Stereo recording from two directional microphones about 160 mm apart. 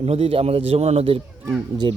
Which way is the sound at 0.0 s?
35° right (ahead or behind).